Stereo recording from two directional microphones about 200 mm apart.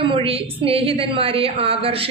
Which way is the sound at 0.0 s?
25° right (ahead or behind).